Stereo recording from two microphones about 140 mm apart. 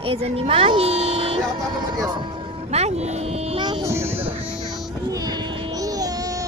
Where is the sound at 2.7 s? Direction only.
50° right (ahead or behind).